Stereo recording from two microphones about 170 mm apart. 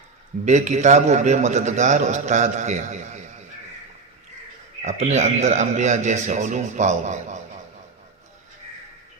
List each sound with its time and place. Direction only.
0.4 s a man's voice: 45° right (ahead or behind)
4.8 s a man's voice: 40° right (ahead or behind)